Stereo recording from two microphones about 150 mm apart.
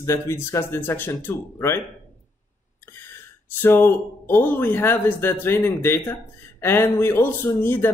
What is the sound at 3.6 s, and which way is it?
Speech, 15° left (ahead or behind).